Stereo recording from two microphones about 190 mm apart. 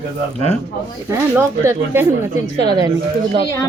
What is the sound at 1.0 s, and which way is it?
Speech, 10° right (ahead or behind).